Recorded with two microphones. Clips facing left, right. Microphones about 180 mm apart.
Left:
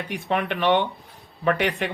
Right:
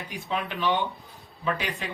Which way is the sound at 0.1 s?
65° left (ahead or behind).